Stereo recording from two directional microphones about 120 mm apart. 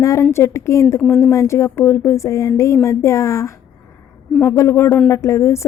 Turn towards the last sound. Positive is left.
turn(degrees=25)  # may be behind; listen again after turning